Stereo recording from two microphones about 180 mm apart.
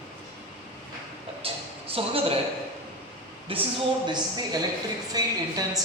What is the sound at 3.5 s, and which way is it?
Speech, 30° right (ahead or behind).